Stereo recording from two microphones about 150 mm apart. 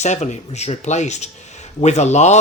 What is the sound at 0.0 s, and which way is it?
Speech, 50° left (ahead or behind).